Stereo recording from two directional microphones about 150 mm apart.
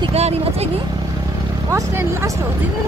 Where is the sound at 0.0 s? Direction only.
45° right (ahead or behind).